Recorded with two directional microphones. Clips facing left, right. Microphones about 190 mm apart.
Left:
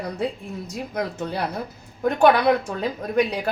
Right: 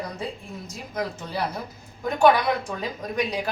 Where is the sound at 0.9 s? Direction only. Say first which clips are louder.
Left 2 dB; 60° left (ahead or behind).